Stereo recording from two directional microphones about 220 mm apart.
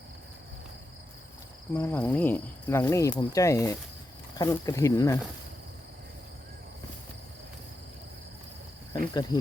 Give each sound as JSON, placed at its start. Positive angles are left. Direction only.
{"t": 1.7, "sound": "speech", "side_deg": 10}
{"t": 8.9, "sound": "speech", "side_deg": 20}